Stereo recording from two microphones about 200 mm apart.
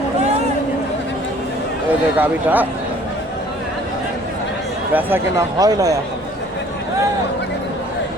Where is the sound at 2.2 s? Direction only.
10° right (ahead or behind).